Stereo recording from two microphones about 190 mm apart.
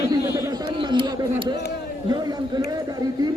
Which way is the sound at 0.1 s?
15° right (ahead or behind).